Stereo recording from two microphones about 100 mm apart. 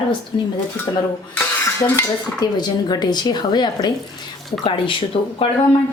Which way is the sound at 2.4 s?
45° left (ahead or behind).